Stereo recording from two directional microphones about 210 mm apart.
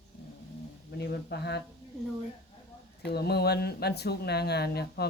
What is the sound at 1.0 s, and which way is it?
Speech, 50° left (ahead or behind).